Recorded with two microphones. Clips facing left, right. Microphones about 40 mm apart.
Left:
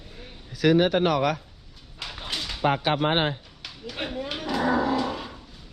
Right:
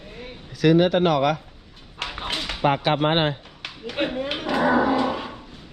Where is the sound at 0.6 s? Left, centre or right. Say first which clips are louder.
Right 3 dB; right.